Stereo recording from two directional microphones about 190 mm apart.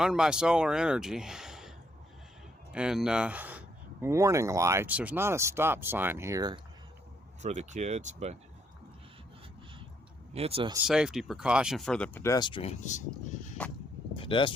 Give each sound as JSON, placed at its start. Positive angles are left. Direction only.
{"t": 0.0, "sound": "speech", "side_deg": -5}
{"t": 2.7, "sound": "speech", "side_deg": -5}
{"t": 7.4, "sound": "speech", "side_deg": -40}
{"t": 10.3, "sound": "speech", "side_deg": -30}
{"t": 10.8, "sound": "speech", "side_deg": -5}
{"t": 14.2, "sound": "a sound", "side_deg": 25}